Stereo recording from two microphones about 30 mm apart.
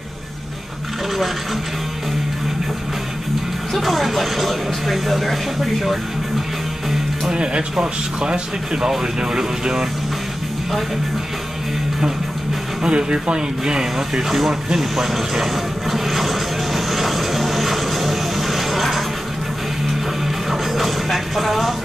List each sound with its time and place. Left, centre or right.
3.7 s speech: centre
7.2 s speech: right
12.8 s speech: right
14.8 s a sound: centre
20.4 s music: centre